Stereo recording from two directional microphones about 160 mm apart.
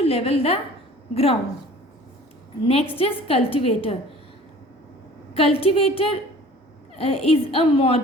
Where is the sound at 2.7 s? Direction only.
35° left (ahead or behind).